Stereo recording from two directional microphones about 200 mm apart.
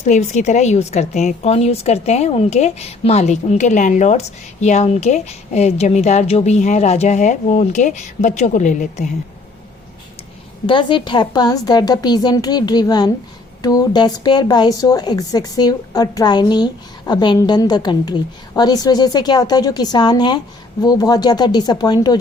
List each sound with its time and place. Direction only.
0.0 s a woman's voice: 35° left (ahead or behind)
10.7 s a woman's voice: 25° left (ahead or behind)